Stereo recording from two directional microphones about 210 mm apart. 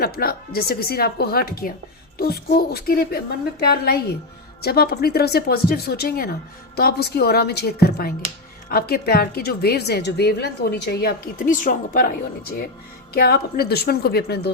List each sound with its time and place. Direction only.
0.0 s a woman's voice: 45° left (ahead or behind)